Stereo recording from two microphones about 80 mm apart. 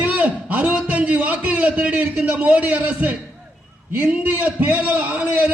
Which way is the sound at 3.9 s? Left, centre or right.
Right.